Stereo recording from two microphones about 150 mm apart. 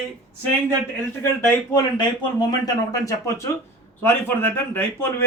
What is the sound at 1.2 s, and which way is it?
Speech, 15° left (ahead or behind).